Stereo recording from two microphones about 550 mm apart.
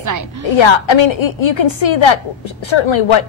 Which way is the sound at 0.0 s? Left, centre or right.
Right.